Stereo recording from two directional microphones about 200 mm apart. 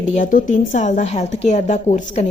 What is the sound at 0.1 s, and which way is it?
Speech, 40° left (ahead or behind).